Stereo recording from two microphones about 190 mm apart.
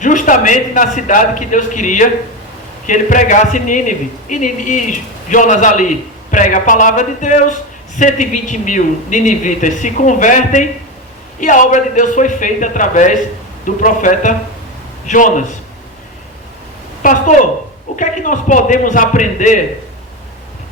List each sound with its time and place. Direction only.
0.0 s a man's voice: 40° left (ahead or behind)
17.0 s a man's voice: 45° left (ahead or behind)